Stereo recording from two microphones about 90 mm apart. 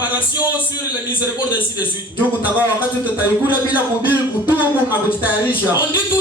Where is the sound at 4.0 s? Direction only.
20° right (ahead or behind).